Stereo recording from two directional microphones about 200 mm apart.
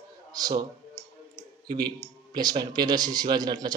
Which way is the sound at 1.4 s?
20° right (ahead or behind).